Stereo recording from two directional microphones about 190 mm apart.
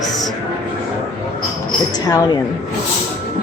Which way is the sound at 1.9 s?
20° left (ahead or behind).